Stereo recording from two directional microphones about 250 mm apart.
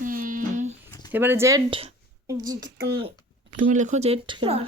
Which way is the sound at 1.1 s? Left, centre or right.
Centre.